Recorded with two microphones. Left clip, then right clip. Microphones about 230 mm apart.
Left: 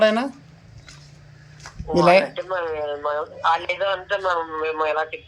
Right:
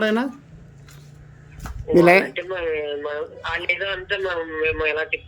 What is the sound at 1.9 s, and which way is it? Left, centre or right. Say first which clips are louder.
Speech: right 1 dB; centre.